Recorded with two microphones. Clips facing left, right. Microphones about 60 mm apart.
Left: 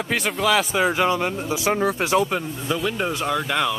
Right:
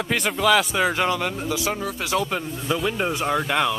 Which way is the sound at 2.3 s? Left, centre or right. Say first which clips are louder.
Left 1 dB; centre.